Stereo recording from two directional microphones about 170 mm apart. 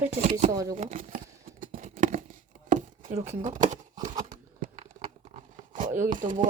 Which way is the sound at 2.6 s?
50° right (ahead or behind).